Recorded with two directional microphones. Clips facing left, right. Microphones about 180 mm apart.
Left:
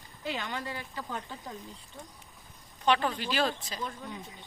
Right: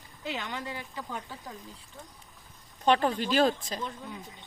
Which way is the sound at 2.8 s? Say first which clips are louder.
Right 3 dB; 40° right (ahead or behind).